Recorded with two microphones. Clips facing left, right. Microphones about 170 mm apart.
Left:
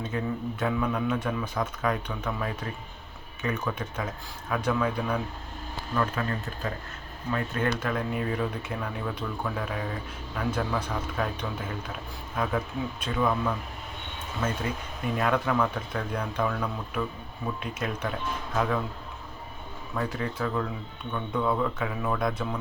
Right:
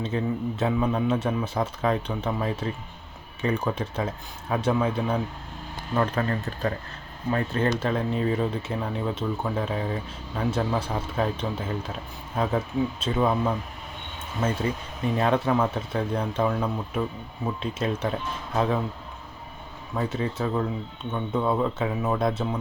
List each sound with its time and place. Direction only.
0.1 s speech: 25° right (ahead or behind)
5.9 s speech: 35° right (ahead or behind)
20.0 s speech: 20° right (ahead or behind)